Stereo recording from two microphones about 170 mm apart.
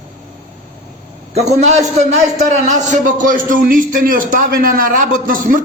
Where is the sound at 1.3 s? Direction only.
40° right (ahead or behind).